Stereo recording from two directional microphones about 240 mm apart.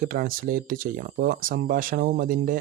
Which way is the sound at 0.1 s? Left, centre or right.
Right.